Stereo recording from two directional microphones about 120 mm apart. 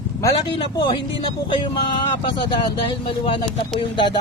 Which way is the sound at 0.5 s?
45° left (ahead or behind).